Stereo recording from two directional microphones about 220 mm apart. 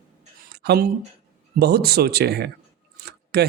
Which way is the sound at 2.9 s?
45° right (ahead or behind).